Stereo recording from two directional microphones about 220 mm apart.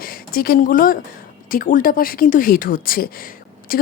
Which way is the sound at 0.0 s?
40° left (ahead or behind).